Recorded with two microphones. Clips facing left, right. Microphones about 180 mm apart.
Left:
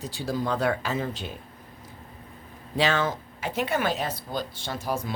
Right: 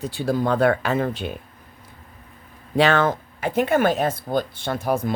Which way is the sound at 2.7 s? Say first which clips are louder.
Right 6 dB; 60° right (ahead or behind).